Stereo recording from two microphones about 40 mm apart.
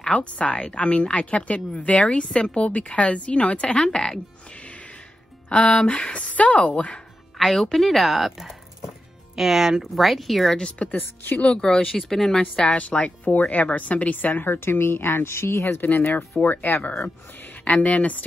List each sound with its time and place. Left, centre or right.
0.1 s a woman's voice: left
3.8 s speech: centre
4.6 s music: left
5.9 s a woman's voice: left
7.3 s speech: centre
10.7 s a woman's voice: left
11.6 s a woman's voice: centre
12.4 s a woman's voice: left
15.8 s a woman's voice: left
17.6 s a woman's voice: left